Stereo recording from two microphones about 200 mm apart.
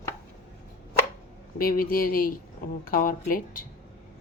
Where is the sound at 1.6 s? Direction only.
45° left (ahead or behind).